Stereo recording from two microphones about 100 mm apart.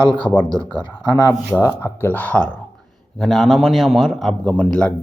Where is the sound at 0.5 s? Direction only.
55° left (ahead or behind).